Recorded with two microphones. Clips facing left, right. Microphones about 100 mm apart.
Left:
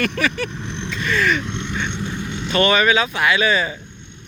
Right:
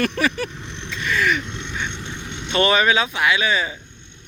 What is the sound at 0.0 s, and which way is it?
Vehicle, 35° right (ahead or behind).